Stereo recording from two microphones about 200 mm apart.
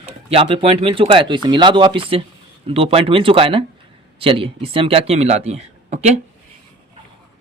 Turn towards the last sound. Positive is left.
turn(degrees=-35)  # may be behind; listen again after turning